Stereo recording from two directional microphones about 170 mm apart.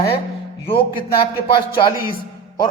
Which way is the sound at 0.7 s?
30° left (ahead or behind).